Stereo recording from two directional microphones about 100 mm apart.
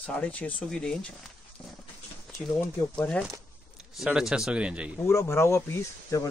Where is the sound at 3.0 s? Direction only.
10° left (ahead or behind).